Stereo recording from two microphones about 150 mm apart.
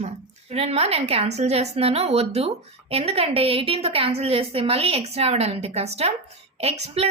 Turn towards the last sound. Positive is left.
turn(degrees=-45)  # may be behind; listen again after turning